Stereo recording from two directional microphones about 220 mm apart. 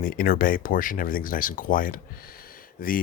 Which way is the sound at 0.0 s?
40° left (ahead or behind).